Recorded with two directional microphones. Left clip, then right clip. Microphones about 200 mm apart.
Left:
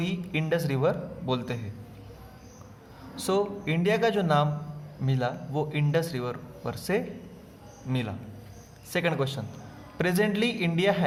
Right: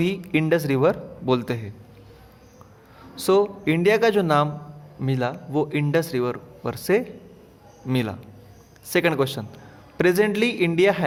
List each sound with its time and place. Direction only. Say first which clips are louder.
0.0 s speech: right 9 dB; 40° right (ahead or behind)
3.2 s speech: right 8 dB; 35° right (ahead or behind)